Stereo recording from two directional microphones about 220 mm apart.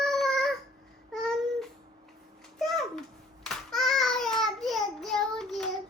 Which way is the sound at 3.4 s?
Centre (ahead or behind).